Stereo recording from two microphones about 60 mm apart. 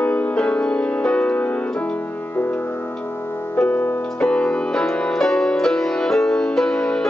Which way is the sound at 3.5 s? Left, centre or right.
Left.